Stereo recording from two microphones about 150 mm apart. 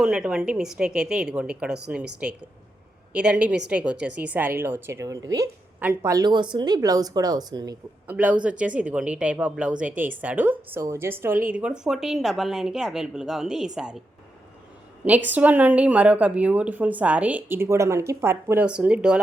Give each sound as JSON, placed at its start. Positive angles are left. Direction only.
{"t": 0.0, "sound": "a woman's voice", "side_deg": -5}
{"t": 8.0, "sound": "a woman's voice", "side_deg": -10}
{"t": 15.3, "sound": "a woman's voice", "side_deg": -10}